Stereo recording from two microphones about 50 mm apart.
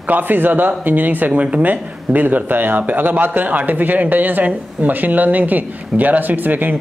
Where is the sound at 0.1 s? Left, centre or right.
Right.